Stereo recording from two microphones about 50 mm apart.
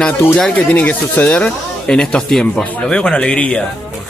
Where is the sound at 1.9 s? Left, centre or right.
Centre.